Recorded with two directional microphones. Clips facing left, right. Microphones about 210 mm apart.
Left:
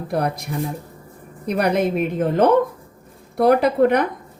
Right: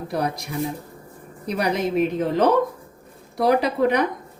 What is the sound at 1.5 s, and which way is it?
A woman's voice, 55° left (ahead or behind).